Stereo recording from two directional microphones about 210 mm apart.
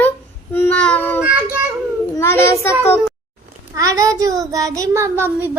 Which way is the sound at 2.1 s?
10° left (ahead or behind).